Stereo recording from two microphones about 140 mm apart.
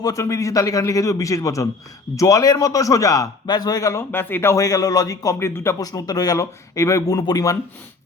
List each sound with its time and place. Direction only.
0.0 s a man's voice: 25° left (ahead or behind)